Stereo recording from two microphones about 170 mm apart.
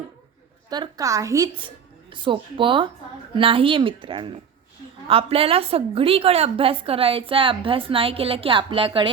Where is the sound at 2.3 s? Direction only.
30° right (ahead or behind).